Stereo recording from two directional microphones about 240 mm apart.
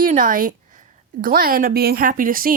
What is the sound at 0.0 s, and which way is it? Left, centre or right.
Speech, right.